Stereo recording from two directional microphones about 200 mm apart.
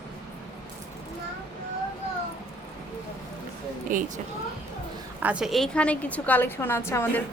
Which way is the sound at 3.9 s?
45° right (ahead or behind).